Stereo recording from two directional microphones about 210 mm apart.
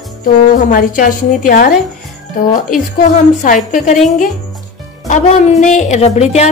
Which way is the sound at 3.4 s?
40° left (ahead or behind).